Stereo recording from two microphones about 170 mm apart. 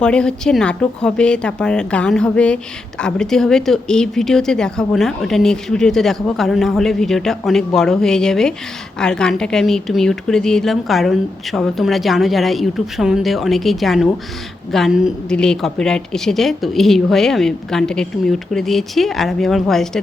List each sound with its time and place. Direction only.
0.0 s speech: 5° left (ahead or behind)